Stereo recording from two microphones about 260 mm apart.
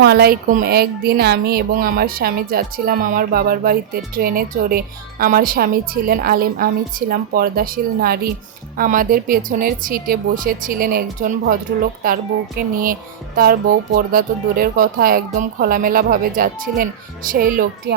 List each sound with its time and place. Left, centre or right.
0.0 s speech: right